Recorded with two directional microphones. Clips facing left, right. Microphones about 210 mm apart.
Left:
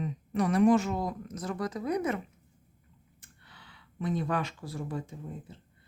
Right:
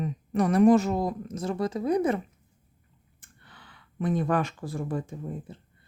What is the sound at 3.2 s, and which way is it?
Speech, 50° right (ahead or behind).